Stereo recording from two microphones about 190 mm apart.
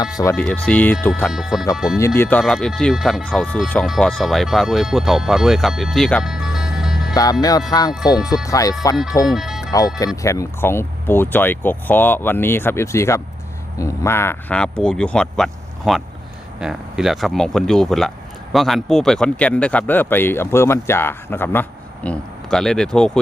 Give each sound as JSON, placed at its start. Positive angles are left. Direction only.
{"t": 0.3, "sound": "speech", "side_deg": 5}
{"t": 1.3, "sound": "speech", "side_deg": 0}
{"t": 2.0, "sound": "speech", "side_deg": 15}
{"t": 7.1, "sound": "speech", "side_deg": 20}
{"t": 9.2, "sound": "music", "side_deg": 0}
{"t": 10.2, "sound": "speech", "side_deg": 15}